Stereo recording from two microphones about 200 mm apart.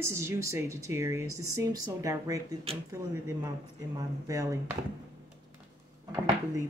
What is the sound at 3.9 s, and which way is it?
Speech, 15° right (ahead or behind).